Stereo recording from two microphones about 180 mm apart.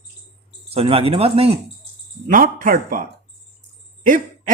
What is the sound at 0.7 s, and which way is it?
Speech, 30° right (ahead or behind).